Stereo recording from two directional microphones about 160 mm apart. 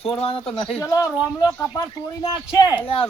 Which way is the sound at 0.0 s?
35° left (ahead or behind).